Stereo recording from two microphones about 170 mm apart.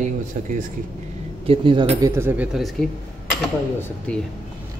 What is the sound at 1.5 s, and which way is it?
Speech, 30° right (ahead or behind).